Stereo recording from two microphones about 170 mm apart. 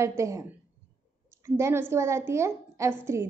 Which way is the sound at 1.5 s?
15° right (ahead or behind).